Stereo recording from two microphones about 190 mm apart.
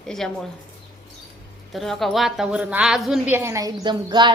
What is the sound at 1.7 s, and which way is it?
A woman's voice, centre (ahead or behind).